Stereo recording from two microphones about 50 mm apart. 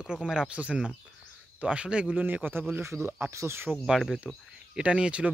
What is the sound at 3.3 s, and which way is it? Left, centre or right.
Speech, right.